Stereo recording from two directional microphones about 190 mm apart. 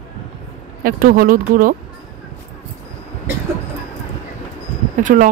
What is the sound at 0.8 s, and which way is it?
Speech, 50° right (ahead or behind).